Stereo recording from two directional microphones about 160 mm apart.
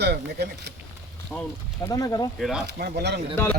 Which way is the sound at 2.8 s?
90° right.